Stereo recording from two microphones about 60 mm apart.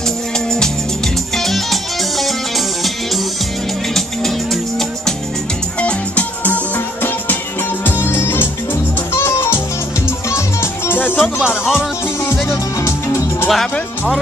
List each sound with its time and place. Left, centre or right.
1.3 s music: centre
3.9 s music: centre
5.8 s music: left
11.0 s music: left
11.3 s music: centre
12.4 s music: left
13.5 s music: centre